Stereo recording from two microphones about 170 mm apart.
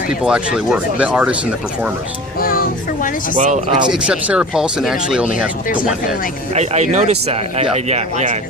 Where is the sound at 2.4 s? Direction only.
60° left (ahead or behind).